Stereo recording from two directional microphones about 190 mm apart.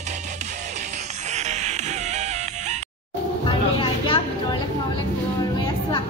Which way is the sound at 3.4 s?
25° left (ahead or behind).